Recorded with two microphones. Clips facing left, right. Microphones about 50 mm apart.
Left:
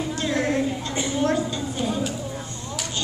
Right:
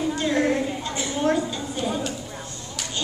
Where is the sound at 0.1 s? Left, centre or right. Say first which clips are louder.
Right 1 dB; centre.